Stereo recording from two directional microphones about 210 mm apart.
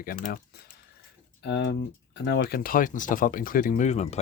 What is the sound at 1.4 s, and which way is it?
Speech, 55° left (ahead or behind).